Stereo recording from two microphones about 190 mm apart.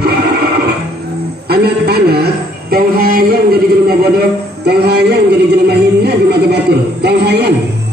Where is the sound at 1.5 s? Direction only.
55° right (ahead or behind).